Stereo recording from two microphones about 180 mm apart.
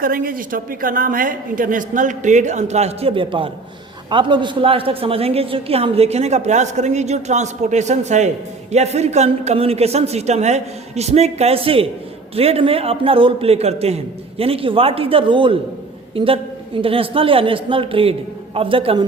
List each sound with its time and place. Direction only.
0.0 s a woman's voice: 50° right (ahead or behind); by 19.0 s 30° right (ahead or behind)